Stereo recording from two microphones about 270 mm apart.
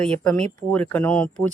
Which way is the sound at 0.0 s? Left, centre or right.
Centre.